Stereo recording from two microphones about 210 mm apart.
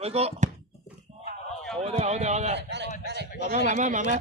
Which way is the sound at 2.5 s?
55° right (ahead or behind).